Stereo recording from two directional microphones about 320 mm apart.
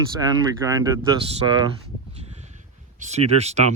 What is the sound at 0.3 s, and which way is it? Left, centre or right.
Speech, centre.